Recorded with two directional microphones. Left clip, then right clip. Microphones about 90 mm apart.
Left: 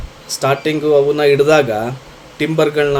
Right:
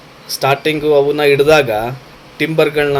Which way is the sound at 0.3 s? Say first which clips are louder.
Right 2 dB; 35° left (ahead or behind).